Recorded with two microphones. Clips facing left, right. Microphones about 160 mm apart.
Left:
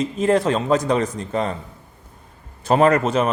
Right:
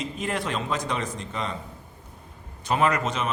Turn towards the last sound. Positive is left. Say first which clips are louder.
# left 8 dB
turn(degrees=40)  # may be behind; listen again after turning